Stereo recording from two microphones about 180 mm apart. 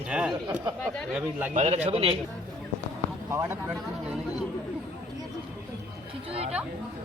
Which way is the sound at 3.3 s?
15° right (ahead or behind).